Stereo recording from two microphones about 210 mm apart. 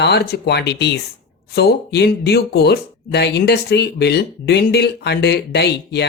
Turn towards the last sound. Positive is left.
turn(degrees=50)  # may be behind; listen again after turning